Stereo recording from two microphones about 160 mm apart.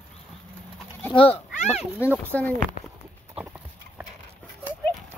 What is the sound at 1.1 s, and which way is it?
Speech, 35° left (ahead or behind).